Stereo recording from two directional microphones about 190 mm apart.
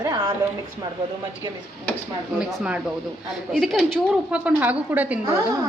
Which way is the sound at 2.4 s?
5° right (ahead or behind).